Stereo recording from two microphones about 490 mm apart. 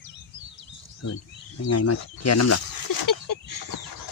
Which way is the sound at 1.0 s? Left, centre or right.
Left.